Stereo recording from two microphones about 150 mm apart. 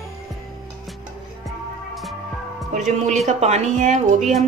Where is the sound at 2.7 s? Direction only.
55° right (ahead or behind).